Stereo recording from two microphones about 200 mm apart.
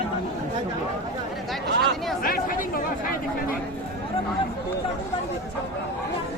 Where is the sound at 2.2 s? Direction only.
45° left (ahead or behind).